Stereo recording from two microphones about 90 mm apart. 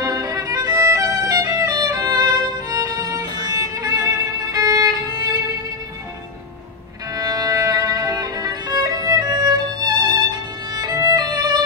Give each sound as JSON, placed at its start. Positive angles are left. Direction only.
{"t": 0.0, "sound": "violin", "side_deg": -40}
{"t": 7.2, "sound": "violin", "side_deg": -45}